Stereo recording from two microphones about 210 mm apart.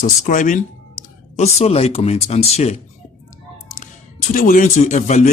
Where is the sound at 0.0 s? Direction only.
40° left (ahead or behind).